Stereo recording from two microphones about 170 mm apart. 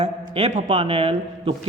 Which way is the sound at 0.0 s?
40° right (ahead or behind).